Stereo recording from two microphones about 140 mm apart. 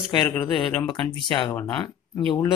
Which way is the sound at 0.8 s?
35° left (ahead or behind).